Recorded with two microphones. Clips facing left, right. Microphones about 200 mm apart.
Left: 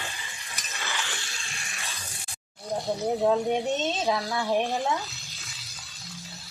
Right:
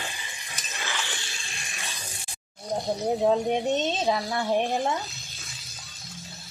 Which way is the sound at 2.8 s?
15° right (ahead or behind).